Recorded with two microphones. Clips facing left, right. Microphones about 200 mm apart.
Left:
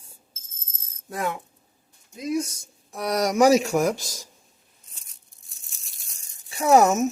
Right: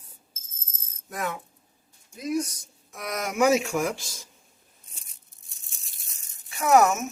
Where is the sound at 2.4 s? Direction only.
30° left (ahead or behind).